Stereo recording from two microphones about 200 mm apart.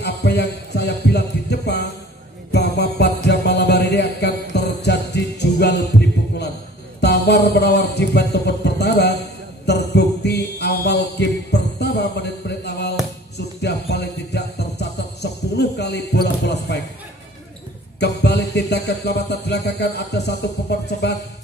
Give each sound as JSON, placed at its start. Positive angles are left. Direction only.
{"t": 0.0, "sound": "music", "side_deg": 55}
{"t": 9.7, "sound": "mantra", "side_deg": 55}
{"t": 13.6, "sound": "music", "side_deg": 55}
{"t": 15.5, "sound": "a sound", "side_deg": 55}
{"t": 17.9, "sound": "a sound", "side_deg": 55}
{"t": 21.0, "sound": "speech", "side_deg": 60}